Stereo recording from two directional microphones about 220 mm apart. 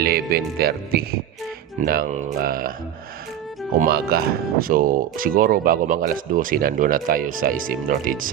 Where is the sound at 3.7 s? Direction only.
45° right (ahead or behind).